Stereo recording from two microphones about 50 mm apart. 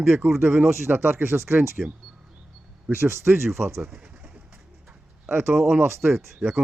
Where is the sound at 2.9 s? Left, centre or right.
Right.